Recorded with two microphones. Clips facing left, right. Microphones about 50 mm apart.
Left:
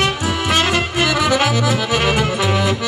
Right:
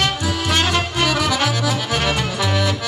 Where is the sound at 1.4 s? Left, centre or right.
Centre.